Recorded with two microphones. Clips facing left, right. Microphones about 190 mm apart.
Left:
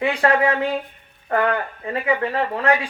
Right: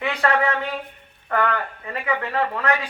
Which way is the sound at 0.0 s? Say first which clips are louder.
Left 3 dB; 30° left (ahead or behind).